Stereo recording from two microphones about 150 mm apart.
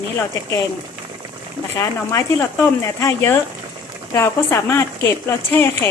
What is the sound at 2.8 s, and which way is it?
Speech, 20° left (ahead or behind).